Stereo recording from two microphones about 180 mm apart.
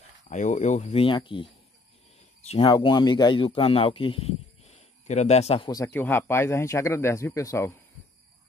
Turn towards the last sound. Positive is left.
turn(degrees=15)  # may be behind; listen again after turning